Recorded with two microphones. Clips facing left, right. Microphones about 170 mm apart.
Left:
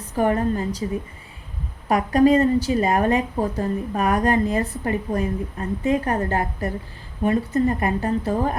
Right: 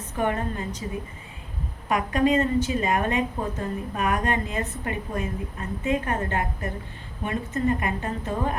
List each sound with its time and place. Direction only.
0.2 s a woman's voice: 35° left (ahead or behind)
1.9 s a woman's voice: 35° left (ahead or behind)